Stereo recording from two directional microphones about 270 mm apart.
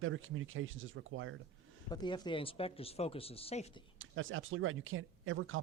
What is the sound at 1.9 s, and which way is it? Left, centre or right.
Speech, centre.